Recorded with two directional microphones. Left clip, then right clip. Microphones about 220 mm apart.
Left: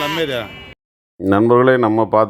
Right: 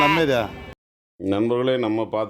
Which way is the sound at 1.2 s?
25° left (ahead or behind).